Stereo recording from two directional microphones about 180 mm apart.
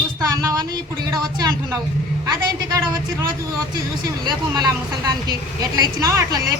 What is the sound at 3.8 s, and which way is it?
A woman's voice, 20° right (ahead or behind).